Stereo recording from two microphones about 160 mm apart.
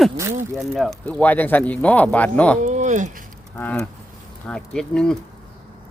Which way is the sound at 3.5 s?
10° left (ahead or behind).